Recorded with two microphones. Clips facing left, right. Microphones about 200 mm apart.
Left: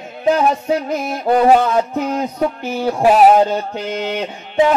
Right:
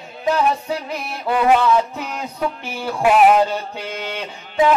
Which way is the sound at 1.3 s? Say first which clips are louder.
Left 3 dB; 40° left (ahead or behind).